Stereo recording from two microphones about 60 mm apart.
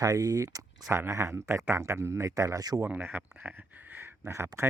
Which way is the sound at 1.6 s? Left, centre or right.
Right.